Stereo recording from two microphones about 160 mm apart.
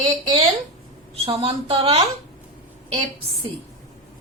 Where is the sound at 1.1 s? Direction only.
35° right (ahead or behind).